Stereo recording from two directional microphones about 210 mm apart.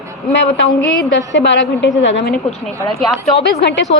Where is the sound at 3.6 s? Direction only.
55° left (ahead or behind).